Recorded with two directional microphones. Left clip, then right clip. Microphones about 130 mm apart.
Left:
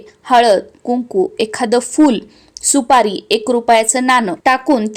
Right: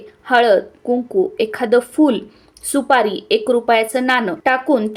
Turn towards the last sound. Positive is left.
turn(degrees=45)  # may be behind; listen again after turning